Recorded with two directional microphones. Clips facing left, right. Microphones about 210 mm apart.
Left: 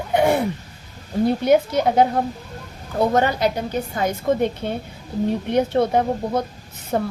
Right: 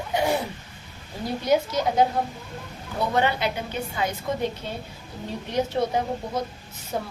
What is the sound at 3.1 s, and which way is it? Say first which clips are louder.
A woman's voice: left 5 dB; 40° left (ahead or behind).